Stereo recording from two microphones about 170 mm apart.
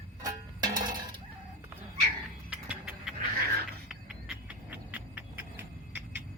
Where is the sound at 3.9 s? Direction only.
5° right (ahead or behind).